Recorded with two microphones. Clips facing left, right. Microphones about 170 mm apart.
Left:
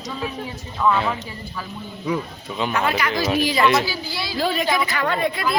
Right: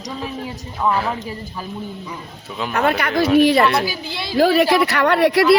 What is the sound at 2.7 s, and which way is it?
Speech, 55° right (ahead or behind).